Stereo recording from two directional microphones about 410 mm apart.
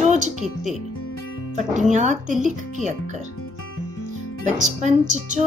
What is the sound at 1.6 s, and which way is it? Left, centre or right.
Speech, centre.